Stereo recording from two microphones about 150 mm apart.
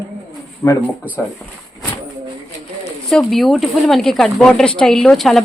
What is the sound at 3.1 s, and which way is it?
A woman's voice, centre (ahead or behind).